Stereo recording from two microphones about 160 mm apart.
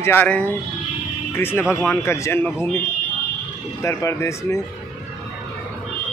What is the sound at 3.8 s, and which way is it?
Speech, 20° left (ahead or behind).